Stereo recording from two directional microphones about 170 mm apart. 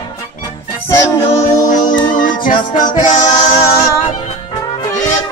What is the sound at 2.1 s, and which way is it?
Music, 50° left (ahead or behind).